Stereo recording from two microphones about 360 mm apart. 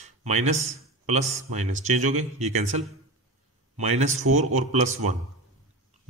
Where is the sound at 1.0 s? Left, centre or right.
Centre.